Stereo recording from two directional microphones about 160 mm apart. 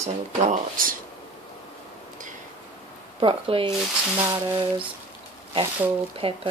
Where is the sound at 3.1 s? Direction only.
35° right (ahead or behind).